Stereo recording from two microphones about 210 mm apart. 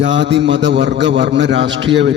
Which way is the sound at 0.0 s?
60° right (ahead or behind).